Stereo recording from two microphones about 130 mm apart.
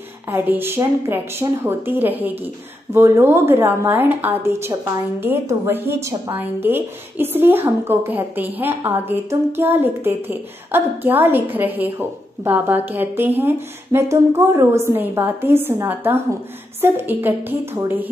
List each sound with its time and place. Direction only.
0.3 s a woman's voice: 15° right (ahead or behind)